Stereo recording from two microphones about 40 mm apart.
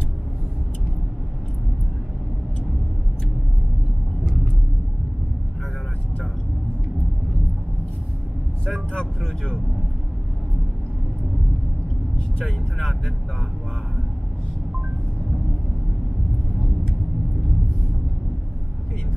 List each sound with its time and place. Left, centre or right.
8.9 s vehicle: centre
12.4 s vehicle: centre